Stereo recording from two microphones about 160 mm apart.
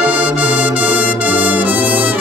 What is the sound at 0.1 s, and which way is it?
Music, 10° right (ahead or behind).